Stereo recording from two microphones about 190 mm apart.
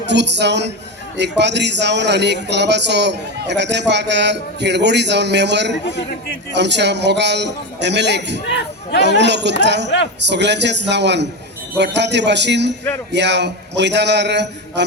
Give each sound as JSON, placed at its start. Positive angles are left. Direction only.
{"t": 0.1, "sound": "speech", "side_deg": -65}
{"t": 8.5, "sound": "speech", "side_deg": 65}
{"t": 9.0, "sound": "speech", "side_deg": -65}